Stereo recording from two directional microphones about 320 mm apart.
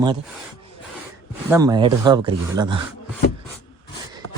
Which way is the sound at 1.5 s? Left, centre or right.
Centre.